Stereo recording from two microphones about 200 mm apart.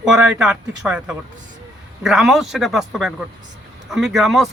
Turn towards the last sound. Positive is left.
turn(degrees=0)  # may be behind; listen again after turning